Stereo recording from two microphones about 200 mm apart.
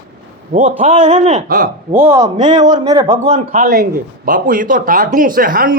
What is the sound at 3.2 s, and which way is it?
Speech, 35° right (ahead or behind).